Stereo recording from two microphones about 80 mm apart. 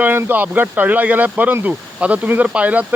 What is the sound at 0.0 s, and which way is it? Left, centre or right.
Speech, right.